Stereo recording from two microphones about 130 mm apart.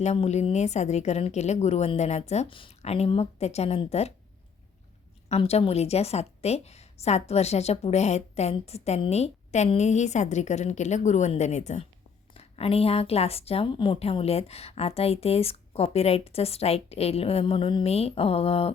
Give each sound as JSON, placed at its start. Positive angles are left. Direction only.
{"t": 0.0, "sound": "a woman's voice", "side_deg": 60}
{"t": 2.5, "sound": "a woman's voice", "side_deg": 45}
{"t": 5.3, "sound": "a woman's voice", "side_deg": 55}
{"t": 12.3, "sound": "a woman's voice", "side_deg": 50}